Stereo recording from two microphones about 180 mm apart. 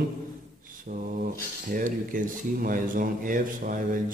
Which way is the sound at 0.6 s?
50° right (ahead or behind).